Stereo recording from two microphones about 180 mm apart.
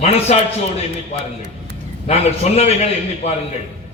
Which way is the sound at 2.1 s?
35° left (ahead or behind).